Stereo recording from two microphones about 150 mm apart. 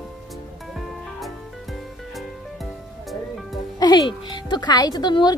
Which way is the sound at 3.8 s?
30° left (ahead or behind).